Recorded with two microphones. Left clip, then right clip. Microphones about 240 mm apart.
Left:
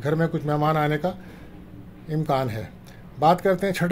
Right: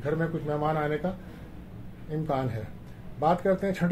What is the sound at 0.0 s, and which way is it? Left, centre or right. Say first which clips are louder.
Speech: left 5 dB; left.